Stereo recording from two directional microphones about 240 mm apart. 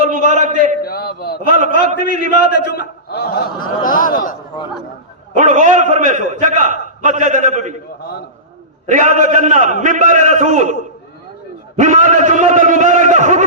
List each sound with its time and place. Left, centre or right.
0.0 s a sound: right
0.8 s a man's voice: left
1.5 s a man's voice: right
2.5 s a man's voice: left
5.4 s a man's voice: right
8.9 s a man's voice: right
11.8 s a man's voice: right